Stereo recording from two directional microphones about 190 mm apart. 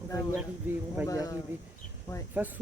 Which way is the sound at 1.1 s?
20° left (ahead or behind).